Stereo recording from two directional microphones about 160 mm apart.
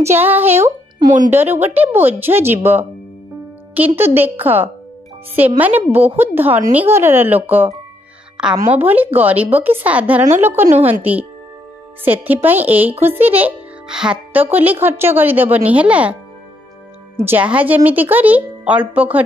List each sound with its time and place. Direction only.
0.0 s a child's voice: 15° right (ahead or behind)
10.6 s a woman's voice: 45° right (ahead or behind)
10.9 s a child's voice: 10° right (ahead or behind)
17.2 s a child's voice: 10° right (ahead or behind)